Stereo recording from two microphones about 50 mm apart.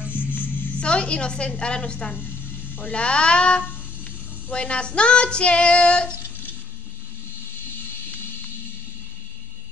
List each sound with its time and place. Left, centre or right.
0.0 s music: right
0.3 s music: left
0.7 s child singing: left
2.1 s a sound: left
2.9 s child singing: left